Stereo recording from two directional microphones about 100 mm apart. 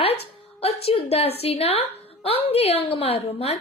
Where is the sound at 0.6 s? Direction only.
80° left.